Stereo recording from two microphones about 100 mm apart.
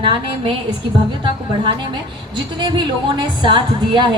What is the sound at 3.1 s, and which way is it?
A woman's voice, 50° right (ahead or behind).